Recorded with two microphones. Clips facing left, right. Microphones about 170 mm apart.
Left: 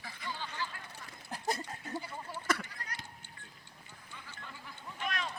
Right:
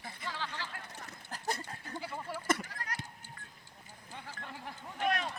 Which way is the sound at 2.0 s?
90° right.